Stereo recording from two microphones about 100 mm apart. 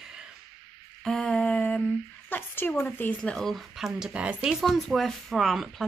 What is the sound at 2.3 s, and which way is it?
A woman's voice, 20° left (ahead or behind).